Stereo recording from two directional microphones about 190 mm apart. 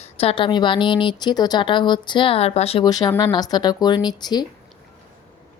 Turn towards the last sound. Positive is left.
turn(degrees=20)  # may be behind; listen again after turning